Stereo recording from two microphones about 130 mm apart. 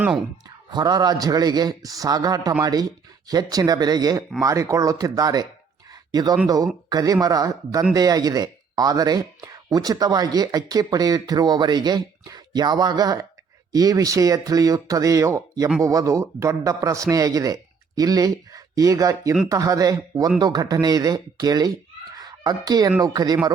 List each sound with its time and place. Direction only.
0.4 s speech: 30° right (ahead or behind)
5.9 s a sound: 30° right (ahead or behind)
6.9 s speech: 30° right (ahead or behind)
22.1 s fowl: 30° right (ahead or behind)
23.0 s speech: 30° right (ahead or behind)